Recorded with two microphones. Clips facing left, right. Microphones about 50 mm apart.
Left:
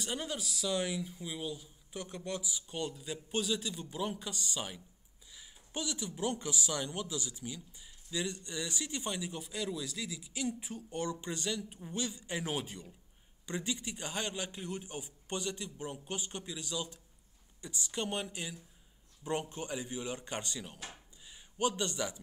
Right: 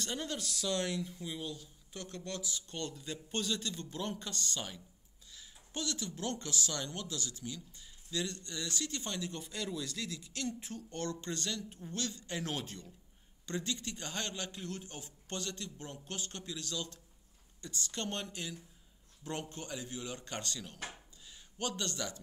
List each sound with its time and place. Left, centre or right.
0.0 s a man's voice: centre